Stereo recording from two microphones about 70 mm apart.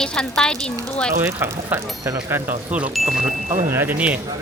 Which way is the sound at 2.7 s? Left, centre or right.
Centre.